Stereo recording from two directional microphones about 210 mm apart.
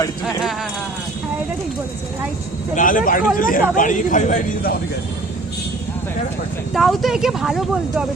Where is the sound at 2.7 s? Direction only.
40° left (ahead or behind).